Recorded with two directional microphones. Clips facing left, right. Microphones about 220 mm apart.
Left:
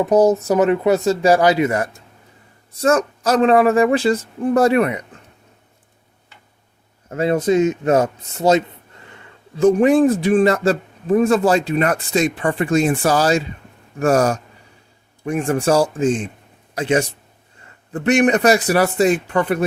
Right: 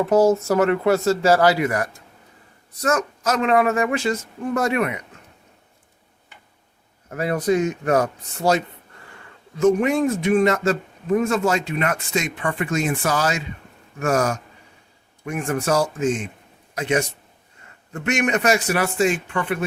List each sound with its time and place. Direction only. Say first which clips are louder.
0.0 s speech: left 2 dB; 20° left (ahead or behind); by 4.9 s 35° left (ahead or behind)
7.1 s a man's voice: left 4 dB; 25° left (ahead or behind)
9.6 s speech: left 5 dB; 30° left (ahead or behind)